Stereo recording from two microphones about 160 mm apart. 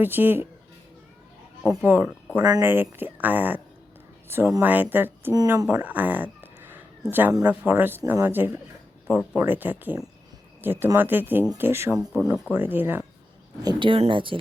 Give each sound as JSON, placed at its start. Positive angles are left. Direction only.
{"t": 0.0, "sound": "speech", "side_deg": -10}
{"t": 1.6, "sound": "speech", "side_deg": -15}
{"t": 2.4, "sound": "speech", "side_deg": -25}
{"t": 2.6, "sound": "speech", "side_deg": -15}
{"t": 5.3, "sound": "speech", "side_deg": -25}
{"t": 5.7, "sound": "speech", "side_deg": -10}
{"t": 13.6, "sound": "speech", "side_deg": -25}